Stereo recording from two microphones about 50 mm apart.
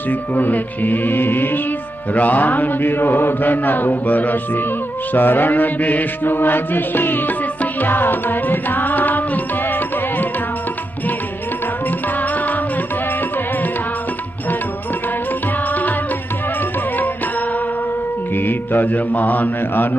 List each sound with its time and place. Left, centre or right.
0.1 s mantra: left
2.1 s mantra: left
7.8 s music: left
18.3 s mantra: left